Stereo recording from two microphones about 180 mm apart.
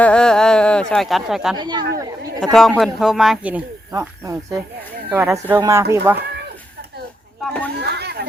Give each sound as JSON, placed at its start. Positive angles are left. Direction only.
{"t": 0.0, "sound": "a sound", "side_deg": 5}
{"t": 1.5, "sound": "speech", "side_deg": -25}
{"t": 2.0, "sound": "chatter", "side_deg": -20}
{"t": 2.4, "sound": "speech", "side_deg": 0}
{"t": 7.4, "sound": "a sound", "side_deg": 10}
{"t": 7.8, "sound": "chatter", "side_deg": -65}